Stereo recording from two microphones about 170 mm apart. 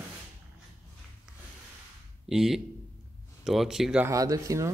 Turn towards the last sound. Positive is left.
turn(degrees=-20)  # may be behind; listen again after turning